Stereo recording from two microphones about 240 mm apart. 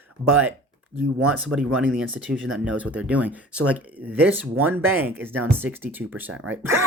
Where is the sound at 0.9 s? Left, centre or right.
Right.